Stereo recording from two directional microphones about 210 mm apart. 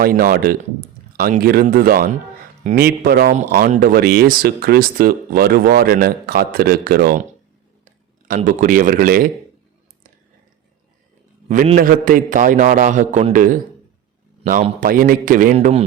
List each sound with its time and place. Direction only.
0.0 s a man's voice: 45° right (ahead or behind)
11.4 s a man's voice: 35° right (ahead or behind)
15.5 s speech: 30° right (ahead or behind)